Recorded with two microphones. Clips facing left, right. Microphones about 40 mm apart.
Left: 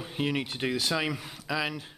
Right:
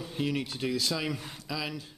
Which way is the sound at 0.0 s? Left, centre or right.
Left.